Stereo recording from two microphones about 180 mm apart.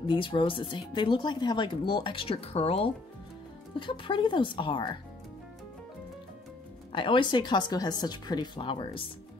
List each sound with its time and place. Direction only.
0.0 s speech: 30° left (ahead or behind)
6.9 s speech: 25° left (ahead or behind)